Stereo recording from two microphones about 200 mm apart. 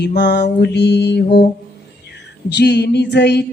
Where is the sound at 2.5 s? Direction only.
55° left (ahead or behind).